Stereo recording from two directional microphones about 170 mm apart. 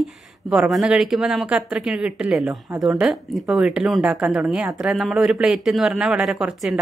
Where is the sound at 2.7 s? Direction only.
20° right (ahead or behind).